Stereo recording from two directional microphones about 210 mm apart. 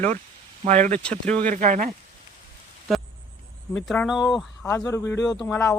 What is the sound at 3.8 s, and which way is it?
Speech, 5° left (ahead or behind).